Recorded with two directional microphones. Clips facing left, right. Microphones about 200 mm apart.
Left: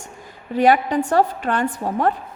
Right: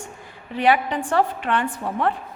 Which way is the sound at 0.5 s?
45° left (ahead or behind).